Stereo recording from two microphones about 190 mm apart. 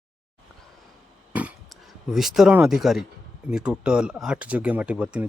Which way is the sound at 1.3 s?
5° right (ahead or behind).